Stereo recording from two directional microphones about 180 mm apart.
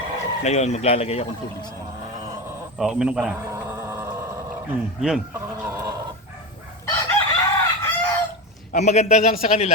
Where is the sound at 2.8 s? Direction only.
5° right (ahead or behind).